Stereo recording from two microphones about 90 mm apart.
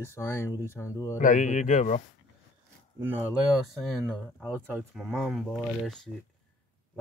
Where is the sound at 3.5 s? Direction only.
5° right (ahead or behind).